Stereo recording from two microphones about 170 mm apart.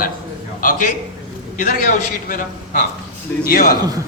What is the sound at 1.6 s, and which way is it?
A man's voice, 55° left (ahead or behind).